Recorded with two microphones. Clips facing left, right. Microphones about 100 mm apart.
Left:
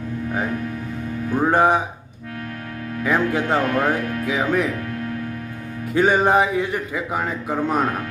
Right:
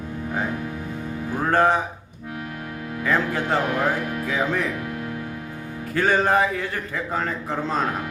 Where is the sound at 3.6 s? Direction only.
15° right (ahead or behind).